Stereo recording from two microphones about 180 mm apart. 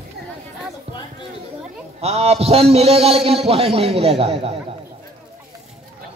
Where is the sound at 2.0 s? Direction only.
35° right (ahead or behind).